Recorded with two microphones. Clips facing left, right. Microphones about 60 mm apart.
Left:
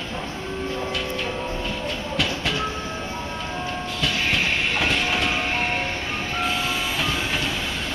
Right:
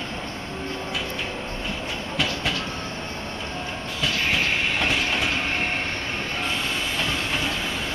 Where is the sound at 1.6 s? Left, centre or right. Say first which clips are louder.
Left 2 dB; centre.